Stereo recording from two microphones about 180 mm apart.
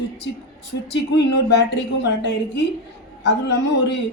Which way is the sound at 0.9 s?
70° left (ahead or behind).